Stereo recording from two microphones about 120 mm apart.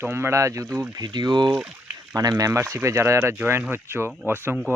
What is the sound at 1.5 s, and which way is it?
Speech, 5° right (ahead or behind).